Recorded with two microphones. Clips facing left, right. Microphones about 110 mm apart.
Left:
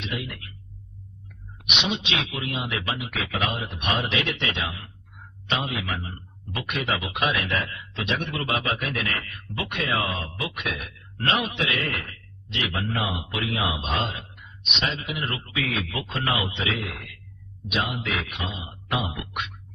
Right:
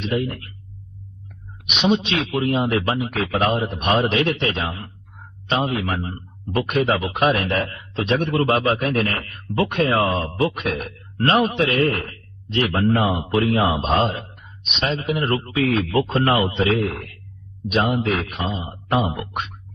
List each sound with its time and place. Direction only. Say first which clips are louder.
0.0 s speech: right 9 dB; 40° right (ahead or behind)
1.8 s speech: right 9 dB; 40° right (ahead or behind)